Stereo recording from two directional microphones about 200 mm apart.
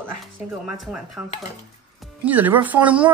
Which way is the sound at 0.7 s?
5° right (ahead or behind).